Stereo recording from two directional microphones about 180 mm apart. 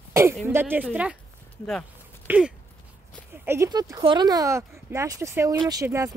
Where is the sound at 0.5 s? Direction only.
10° right (ahead or behind).